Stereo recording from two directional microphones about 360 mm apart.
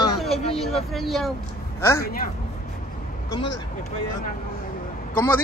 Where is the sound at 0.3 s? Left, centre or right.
Centre.